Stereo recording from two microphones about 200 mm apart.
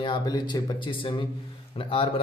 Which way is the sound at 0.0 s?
20° left (ahead or behind).